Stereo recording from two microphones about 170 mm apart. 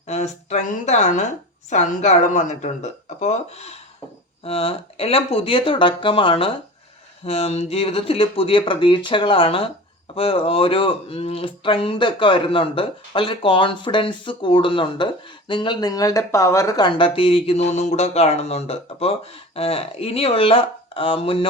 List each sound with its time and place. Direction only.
0.1 s a woman's voice: 40° left (ahead or behind)